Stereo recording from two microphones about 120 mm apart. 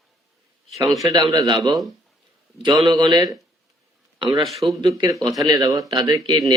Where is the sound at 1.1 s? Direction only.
30° right (ahead or behind).